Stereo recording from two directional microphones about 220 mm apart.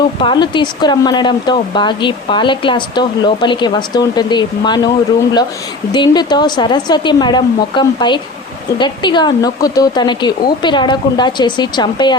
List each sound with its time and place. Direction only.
0.2 s speech: 20° left (ahead or behind)
5.9 s speech: 20° left (ahead or behind)